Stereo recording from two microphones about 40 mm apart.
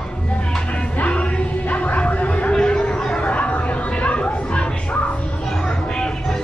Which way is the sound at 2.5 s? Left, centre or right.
Centre.